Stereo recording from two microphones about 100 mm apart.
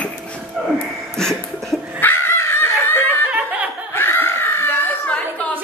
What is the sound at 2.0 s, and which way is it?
Dog, 25° left (ahead or behind).